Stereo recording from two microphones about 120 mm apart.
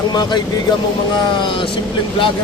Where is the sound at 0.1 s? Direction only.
35° left (ahead or behind).